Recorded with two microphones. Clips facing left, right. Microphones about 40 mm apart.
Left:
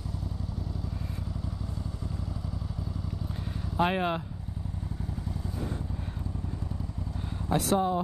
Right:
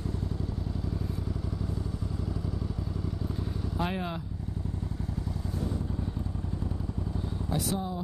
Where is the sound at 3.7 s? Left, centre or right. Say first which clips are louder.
Left 7 dB; left.